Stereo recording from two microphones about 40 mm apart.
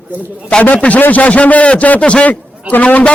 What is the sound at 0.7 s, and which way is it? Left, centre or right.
A man's voice, left.